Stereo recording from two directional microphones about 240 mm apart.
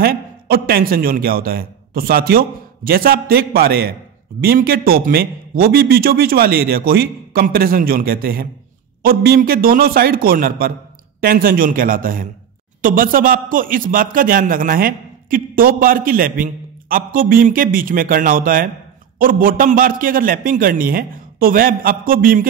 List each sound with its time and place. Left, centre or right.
0.0 s a man's voice: right